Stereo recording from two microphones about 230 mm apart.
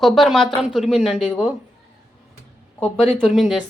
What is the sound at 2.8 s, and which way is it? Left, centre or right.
Speech, centre.